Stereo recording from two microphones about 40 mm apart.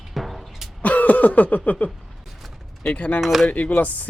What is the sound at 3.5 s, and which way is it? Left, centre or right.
Speech, left.